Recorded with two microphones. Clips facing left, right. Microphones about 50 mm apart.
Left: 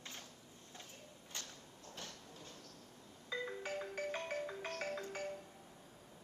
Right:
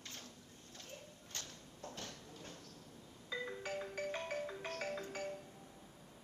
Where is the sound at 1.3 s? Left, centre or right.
Centre.